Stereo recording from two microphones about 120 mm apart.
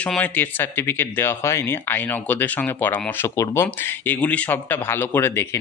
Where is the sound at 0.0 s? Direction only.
10° left (ahead or behind).